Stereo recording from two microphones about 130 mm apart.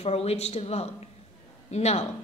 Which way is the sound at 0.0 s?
50° left (ahead or behind).